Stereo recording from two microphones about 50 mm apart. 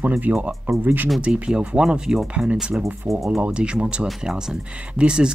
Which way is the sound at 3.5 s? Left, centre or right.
Right.